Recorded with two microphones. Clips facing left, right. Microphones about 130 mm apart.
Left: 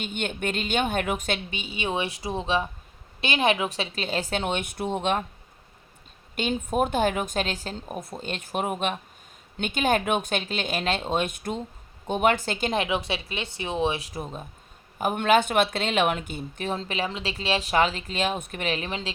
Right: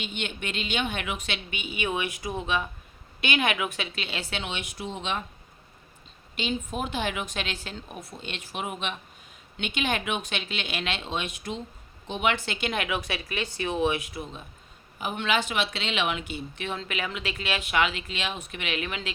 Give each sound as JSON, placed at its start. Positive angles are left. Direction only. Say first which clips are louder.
{"t": 0.0, "sound": "a woman's voice", "louder": "left 5 dB", "side_deg": 45}
{"t": 1.5, "sound": "a woman's voice", "louder": "left 1 dB", "side_deg": 30}
{"t": 6.3, "sound": "a woman's voice", "louder": "left 5 dB", "side_deg": 50}